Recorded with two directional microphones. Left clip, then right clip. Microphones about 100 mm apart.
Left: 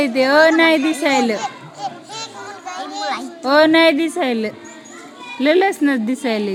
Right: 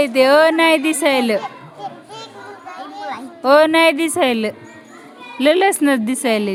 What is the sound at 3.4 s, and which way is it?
Speech, 65° right (ahead or behind).